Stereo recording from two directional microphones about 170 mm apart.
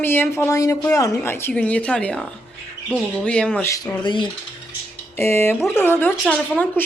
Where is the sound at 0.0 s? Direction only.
10° left (ahead or behind).